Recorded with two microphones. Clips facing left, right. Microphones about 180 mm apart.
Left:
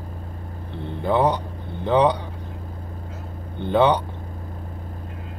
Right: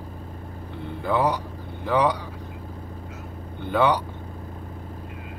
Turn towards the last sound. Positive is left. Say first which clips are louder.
# left 3 dB
turn(degrees=25)  # may be behind; listen again after turning